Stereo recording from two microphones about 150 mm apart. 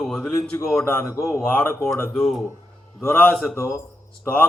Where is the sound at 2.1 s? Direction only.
5° left (ahead or behind).